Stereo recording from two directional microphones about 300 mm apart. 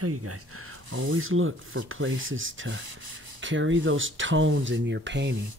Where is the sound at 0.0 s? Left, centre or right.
Right.